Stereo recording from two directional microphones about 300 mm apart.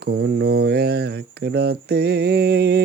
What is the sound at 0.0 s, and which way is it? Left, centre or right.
Speech, right.